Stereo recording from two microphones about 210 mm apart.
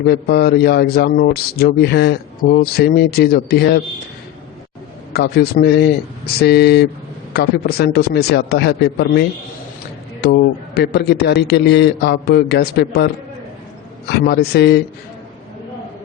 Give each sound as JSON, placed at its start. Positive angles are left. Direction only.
{"t": 0.0, "sound": "a man's voice", "side_deg": 50}
{"t": 5.1, "sound": "a man's voice", "side_deg": 50}
{"t": 10.2, "sound": "a man's voice", "side_deg": 50}
{"t": 14.1, "sound": "a man's voice", "side_deg": 50}